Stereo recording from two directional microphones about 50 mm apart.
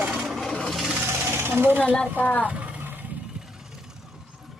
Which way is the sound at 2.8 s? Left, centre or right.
Right.